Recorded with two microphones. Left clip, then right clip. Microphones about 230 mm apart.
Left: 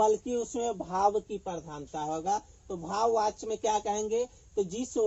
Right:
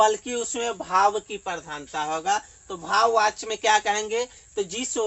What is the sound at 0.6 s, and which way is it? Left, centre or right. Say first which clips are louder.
A man's voice: right 8 dB; right.